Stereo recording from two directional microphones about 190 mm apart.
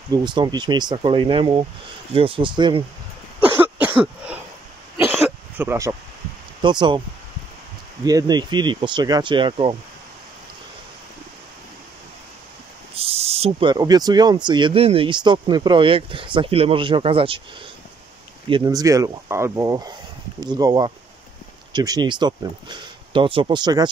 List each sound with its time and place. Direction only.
0.1 s speech: 25° right (ahead or behind)
3.3 s cough: 10° right (ahead or behind)
5.6 s speech: 15° right (ahead or behind)
6.6 s speech: 25° right (ahead or behind)
8.0 s speech: 20° right (ahead or behind)
12.9 s speech: 30° right (ahead or behind)
18.5 s speech: 20° right (ahead or behind)